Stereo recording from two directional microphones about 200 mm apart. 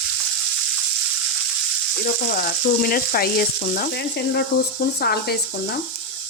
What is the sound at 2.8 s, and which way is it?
Frying, 45° left (ahead or behind).